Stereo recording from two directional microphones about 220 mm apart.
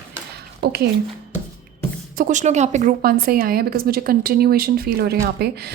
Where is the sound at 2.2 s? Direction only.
35° right (ahead or behind).